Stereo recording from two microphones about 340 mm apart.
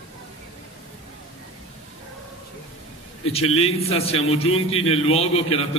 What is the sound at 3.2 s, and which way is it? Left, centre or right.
A man's voice, centre.